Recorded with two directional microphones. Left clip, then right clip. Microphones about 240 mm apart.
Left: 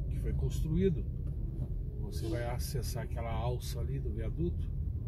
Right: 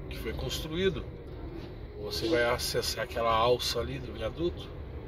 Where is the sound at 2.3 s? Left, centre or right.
Centre.